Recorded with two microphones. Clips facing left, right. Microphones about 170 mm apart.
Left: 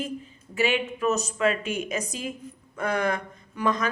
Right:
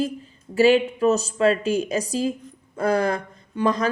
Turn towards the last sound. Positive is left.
turn(degrees=-35)  # may be behind; listen again after turning